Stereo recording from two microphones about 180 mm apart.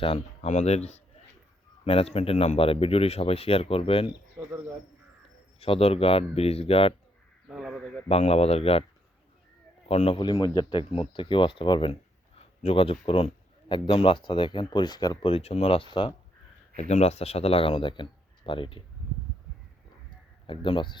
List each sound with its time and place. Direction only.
0.0 s speech: 35° left (ahead or behind)
5.5 s speech: 30° left (ahead or behind)
7.4 s speech: 5° right (ahead or behind)
8.0 s speech: 35° left (ahead or behind)
9.9 s speech: 30° left (ahead or behind)
16.7 s speech: 40° left (ahead or behind)
20.5 s speech: 30° left (ahead or behind)